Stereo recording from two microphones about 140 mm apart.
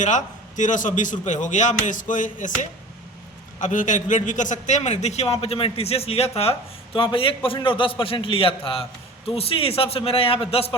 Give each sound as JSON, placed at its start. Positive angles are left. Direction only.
{"t": 0.0, "sound": "a man's voice", "side_deg": 60}